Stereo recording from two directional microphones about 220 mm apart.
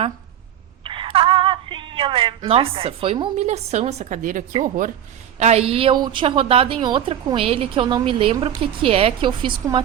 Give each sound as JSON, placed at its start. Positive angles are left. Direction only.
{"t": 0.9, "sound": "a woman's voice", "side_deg": -25}